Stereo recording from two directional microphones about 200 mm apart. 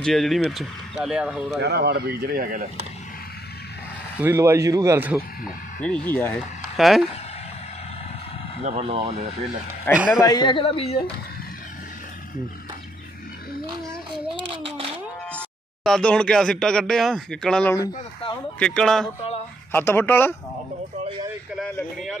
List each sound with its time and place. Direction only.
0.0 s speech: centre (ahead or behind)
1.6 s speech: 55° right (ahead or behind)
4.2 s speech: 10° right (ahead or behind)
5.8 s speech: 5° left (ahead or behind)
8.6 s speech: 30° right (ahead or behind)
9.9 s speech: 10° left (ahead or behind)
10.2 s a woman's voice: 20° left (ahead or behind)
13.8 s a sound: 25° right (ahead or behind)
15.3 s speech: 5° left (ahead or behind)
17.7 s a woman's voice: 20° left (ahead or behind)
18.6 s speech: 5° left (ahead or behind)
21.5 s speech: 5° left (ahead or behind)